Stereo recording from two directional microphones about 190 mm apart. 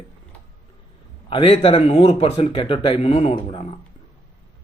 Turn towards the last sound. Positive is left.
turn(degrees=30)  # may be behind; listen again after turning